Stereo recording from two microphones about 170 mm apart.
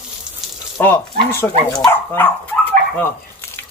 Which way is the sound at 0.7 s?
15° left (ahead or behind).